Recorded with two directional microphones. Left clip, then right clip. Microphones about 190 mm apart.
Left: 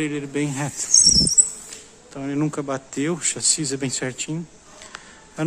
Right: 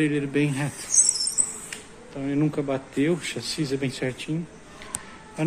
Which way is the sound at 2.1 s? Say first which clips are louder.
Even; 30° left (ahead or behind).